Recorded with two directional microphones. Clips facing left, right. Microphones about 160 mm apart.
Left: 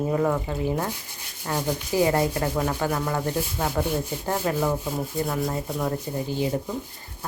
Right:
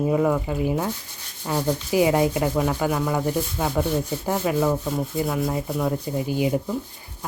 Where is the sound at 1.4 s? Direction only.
10° right (ahead or behind).